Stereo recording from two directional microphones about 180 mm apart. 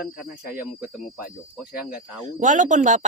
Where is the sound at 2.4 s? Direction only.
45° right (ahead or behind).